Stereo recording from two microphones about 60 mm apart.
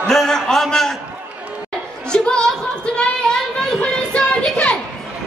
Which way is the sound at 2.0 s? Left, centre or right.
Centre.